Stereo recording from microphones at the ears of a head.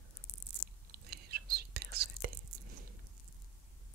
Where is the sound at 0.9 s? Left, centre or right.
Right.